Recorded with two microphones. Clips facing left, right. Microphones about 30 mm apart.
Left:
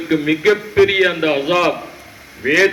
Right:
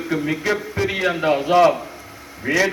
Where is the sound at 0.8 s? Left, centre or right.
Left.